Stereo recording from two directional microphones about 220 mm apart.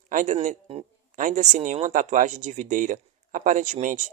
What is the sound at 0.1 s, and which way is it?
A man's voice, 35° right (ahead or behind).